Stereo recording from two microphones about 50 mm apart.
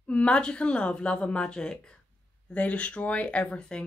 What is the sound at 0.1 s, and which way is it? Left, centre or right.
A woman's voice, left.